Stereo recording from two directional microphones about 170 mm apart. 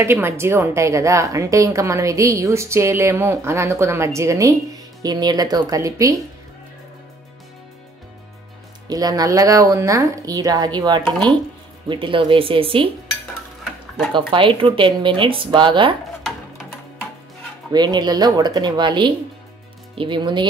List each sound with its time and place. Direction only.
0.0 s a woman's voice: 15° right (ahead or behind)
8.8 s a woman's voice: 20° right (ahead or behind)
14.3 s a woman's voice: 30° right (ahead or behind)
17.7 s a woman's voice: 25° right (ahead or behind)